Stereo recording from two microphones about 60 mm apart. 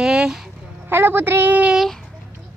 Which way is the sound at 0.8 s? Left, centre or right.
Right.